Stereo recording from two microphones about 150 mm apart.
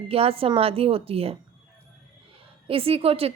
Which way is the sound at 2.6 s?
40° right (ahead or behind).